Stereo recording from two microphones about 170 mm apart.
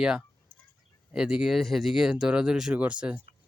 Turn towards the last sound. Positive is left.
turn(degrees=-5)  # may be behind; listen again after turning